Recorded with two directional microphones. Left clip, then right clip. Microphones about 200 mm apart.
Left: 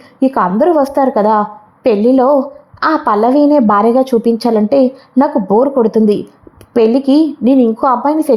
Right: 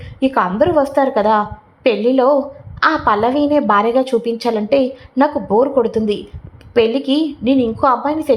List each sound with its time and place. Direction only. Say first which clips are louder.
0.2 s a woman's voice: left 3 dB; 30° left (ahead or behind)